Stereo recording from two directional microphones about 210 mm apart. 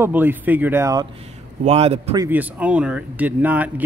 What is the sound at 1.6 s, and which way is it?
Speech, 30° right (ahead or behind).